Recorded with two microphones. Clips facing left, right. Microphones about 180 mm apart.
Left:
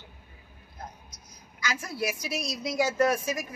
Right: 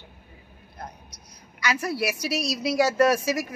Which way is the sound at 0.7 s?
70° right (ahead or behind).